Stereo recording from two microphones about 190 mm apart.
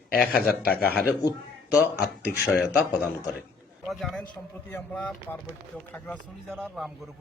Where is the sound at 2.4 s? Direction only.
5° right (ahead or behind).